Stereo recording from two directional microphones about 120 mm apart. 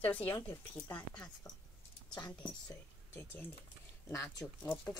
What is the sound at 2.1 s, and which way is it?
Speech, 35° left (ahead or behind).